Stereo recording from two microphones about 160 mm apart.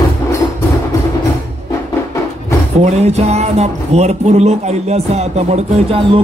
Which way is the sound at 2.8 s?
40° right (ahead or behind).